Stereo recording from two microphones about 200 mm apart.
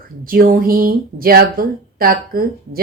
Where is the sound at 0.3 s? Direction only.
45° right (ahead or behind).